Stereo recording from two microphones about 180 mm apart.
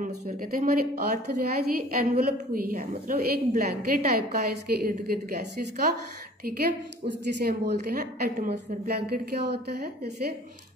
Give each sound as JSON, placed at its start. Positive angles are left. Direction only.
{"t": 0.0, "sound": "a woman's voice", "side_deg": -50}
{"t": 7.3, "sound": "a woman's voice", "side_deg": -65}